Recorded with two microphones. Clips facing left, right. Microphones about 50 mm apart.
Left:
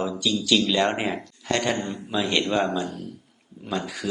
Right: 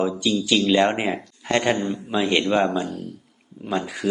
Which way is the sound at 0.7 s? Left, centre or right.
Right.